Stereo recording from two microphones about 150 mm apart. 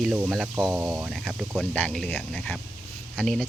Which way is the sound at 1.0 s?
Centre (ahead or behind).